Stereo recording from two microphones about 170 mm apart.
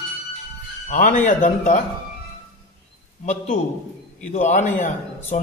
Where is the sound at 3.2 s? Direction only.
45° left (ahead or behind).